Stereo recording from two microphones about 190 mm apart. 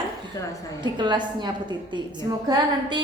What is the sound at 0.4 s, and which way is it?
Speech, 20° left (ahead or behind).